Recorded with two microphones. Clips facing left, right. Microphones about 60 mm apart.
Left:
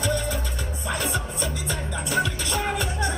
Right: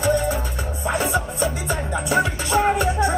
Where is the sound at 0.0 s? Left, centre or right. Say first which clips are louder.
Right 6 dB; right.